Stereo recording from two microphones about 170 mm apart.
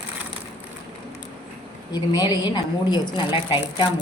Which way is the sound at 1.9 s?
25° left (ahead or behind).